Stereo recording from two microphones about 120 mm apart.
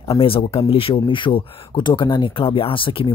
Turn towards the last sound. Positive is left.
turn(degrees=50)  # may be behind; listen again after turning